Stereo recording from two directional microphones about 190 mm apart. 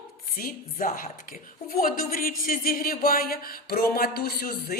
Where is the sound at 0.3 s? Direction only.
45° left (ahead or behind).